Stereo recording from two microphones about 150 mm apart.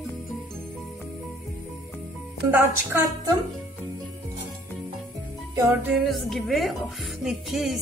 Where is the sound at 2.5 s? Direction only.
15° right (ahead or behind).